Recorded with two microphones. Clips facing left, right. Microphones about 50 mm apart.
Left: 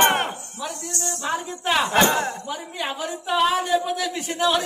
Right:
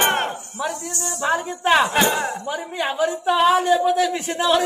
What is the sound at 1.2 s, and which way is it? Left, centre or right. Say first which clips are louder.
Speech: right 6 dB; centre.